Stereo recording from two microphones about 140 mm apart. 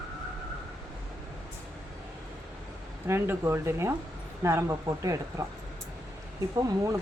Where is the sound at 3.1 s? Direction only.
15° right (ahead or behind).